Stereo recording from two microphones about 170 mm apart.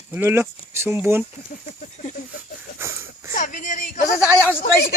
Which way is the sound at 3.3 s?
50° left (ahead or behind).